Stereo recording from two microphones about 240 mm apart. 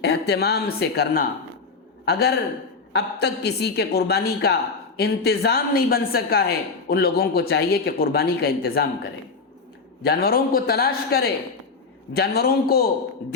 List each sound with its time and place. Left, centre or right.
0.0 s a woman's voice: left